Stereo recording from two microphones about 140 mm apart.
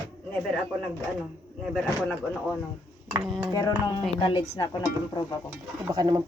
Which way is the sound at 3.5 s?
30° left (ahead or behind).